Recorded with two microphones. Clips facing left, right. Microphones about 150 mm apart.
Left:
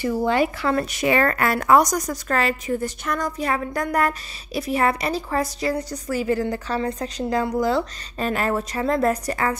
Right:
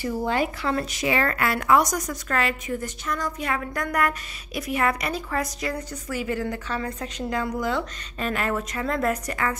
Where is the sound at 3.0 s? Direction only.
55° left (ahead or behind).